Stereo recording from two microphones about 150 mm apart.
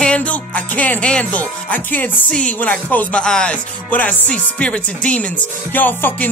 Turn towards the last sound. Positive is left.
turn(degrees=10)  # may be behind; listen again after turning